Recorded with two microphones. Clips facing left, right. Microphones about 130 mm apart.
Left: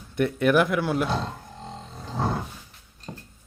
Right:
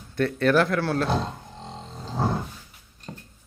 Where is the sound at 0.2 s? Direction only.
15° left (ahead or behind).